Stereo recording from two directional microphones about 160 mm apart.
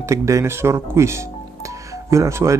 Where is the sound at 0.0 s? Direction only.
20° right (ahead or behind).